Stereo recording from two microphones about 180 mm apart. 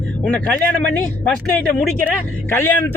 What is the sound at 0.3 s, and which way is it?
A man's voice, 5° left (ahead or behind).